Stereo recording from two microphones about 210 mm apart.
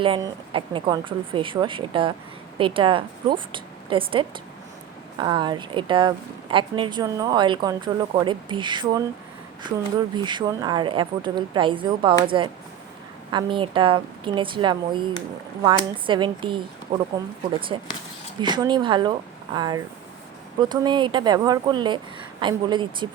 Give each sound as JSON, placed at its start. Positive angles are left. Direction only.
{"t": 0.0, "sound": "speech", "side_deg": -25}
{"t": 10.2, "sound": "speech", "side_deg": -20}